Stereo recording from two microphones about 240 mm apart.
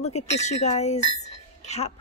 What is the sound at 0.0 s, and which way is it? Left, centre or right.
A woman's voice, left.